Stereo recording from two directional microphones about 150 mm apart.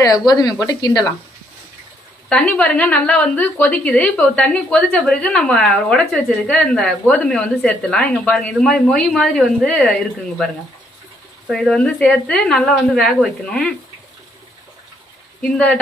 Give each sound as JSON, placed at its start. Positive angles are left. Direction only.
{"t": 0.3, "sound": "speech", "side_deg": 25}
{"t": 2.2, "sound": "a woman's voice", "side_deg": 5}
{"t": 15.4, "sound": "a woman's voice", "side_deg": 5}